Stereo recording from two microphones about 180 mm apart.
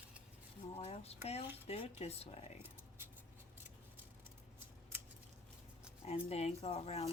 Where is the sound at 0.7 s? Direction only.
35° left (ahead or behind).